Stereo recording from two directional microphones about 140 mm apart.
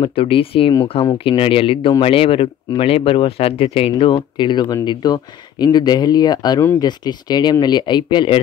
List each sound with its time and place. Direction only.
0.0 s speech: 40° left (ahead or behind)